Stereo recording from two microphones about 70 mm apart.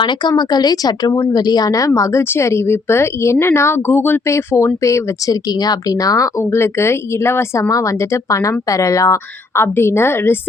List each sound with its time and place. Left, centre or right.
0.1 s speech: left
2.3 s speech: left
4.3 s speech: left
6.4 s speech: left
7.7 s speech: left